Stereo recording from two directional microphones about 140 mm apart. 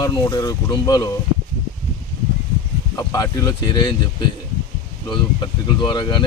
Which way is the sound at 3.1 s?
25° left (ahead or behind).